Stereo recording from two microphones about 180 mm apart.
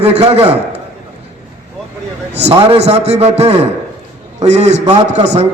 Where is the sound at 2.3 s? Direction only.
35° right (ahead or behind).